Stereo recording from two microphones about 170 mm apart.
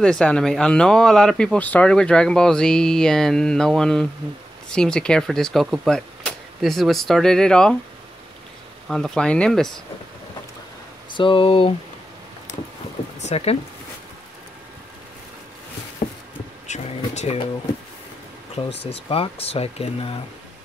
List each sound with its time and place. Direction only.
0.0 s speech: 5° left (ahead or behind)
8.8 s speech: 5° left (ahead or behind)
11.1 s speech: 30° left (ahead or behind)
13.2 s speech: 40° left (ahead or behind)
16.6 s a sound: 45° left (ahead or behind)
19.0 s speech: 35° left (ahead or behind)